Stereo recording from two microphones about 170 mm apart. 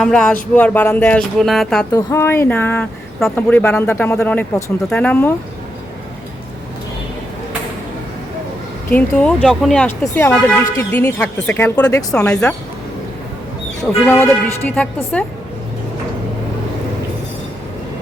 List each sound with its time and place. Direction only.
0.0 s speech: 5° left (ahead or behind)
2.0 s speech: 15° left (ahead or behind)
8.9 s speech: 5° left (ahead or behind)
11.8 s speech: 20° left (ahead or behind)
12.1 s speech: 5° left (ahead or behind)
13.8 s speech: 15° left (ahead or behind)